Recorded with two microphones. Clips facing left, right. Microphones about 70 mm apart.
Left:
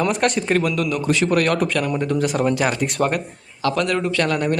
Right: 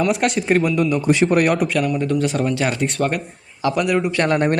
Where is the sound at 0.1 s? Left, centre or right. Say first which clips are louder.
Right 1 dB; centre.